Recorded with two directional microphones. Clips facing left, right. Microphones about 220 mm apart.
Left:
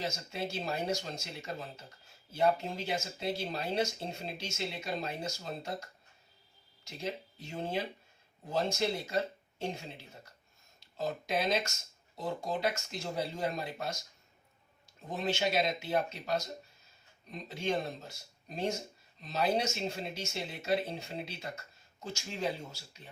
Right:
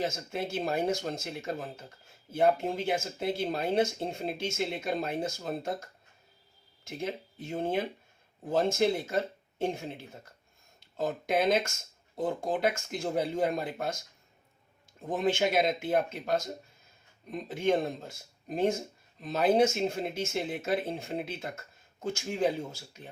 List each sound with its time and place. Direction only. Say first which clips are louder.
0.0 s speech: right 4 dB; 50° right (ahead or behind)
15.0 s speech: right 5 dB; 50° right (ahead or behind)